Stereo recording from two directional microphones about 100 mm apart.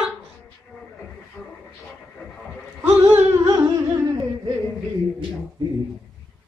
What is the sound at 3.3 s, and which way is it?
Carnatic music, 35° right (ahead or behind).